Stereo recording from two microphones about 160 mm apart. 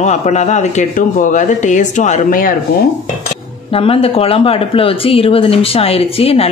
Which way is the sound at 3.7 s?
35° left (ahead or behind).